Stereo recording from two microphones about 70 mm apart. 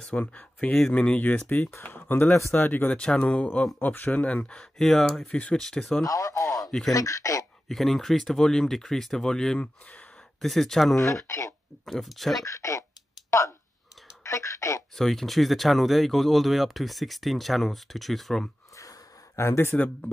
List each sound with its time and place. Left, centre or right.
0.0 s speech: centre
3.0 s speech: centre
4.7 s speech: centre
5.3 s speech: centre
6.0 s speech: left
7.6 s speech: centre
11.2 s speech: left
11.8 s speech: centre
12.4 s speech: left
15.0 s speech: centre
18.8 s a sound: left